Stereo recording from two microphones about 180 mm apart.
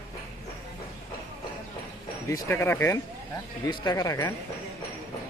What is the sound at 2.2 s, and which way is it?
Speech, 15° left (ahead or behind).